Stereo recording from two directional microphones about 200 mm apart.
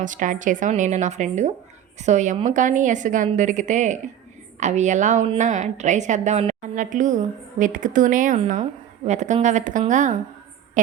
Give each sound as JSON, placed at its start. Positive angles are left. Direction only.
{"t": 0.0, "sound": "a woman's voice", "side_deg": -40}